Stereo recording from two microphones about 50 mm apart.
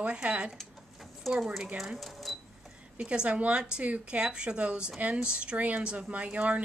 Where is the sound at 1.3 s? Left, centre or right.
Centre.